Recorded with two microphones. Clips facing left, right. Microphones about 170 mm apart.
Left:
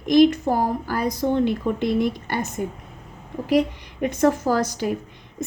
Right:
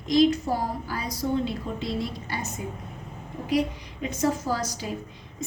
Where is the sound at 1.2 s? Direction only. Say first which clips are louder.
Left 5 dB; 65° left (ahead or behind).